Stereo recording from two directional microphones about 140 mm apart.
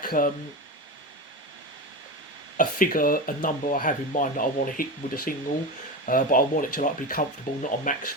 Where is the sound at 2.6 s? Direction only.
75° left (ahead or behind).